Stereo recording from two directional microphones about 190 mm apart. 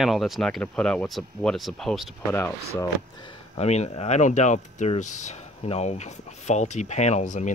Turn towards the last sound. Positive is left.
turn(degrees=40)  # may be behind; listen again after turning